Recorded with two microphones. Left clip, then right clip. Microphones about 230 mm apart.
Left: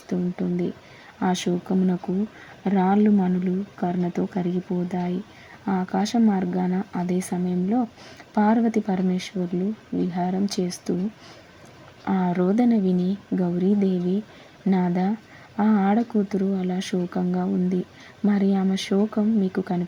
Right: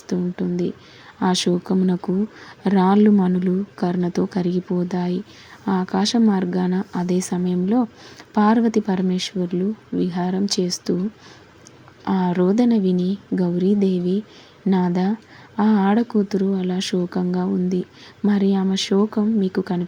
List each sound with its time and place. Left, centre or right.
0.1 s a woman's voice: centre
12.0 s speech: centre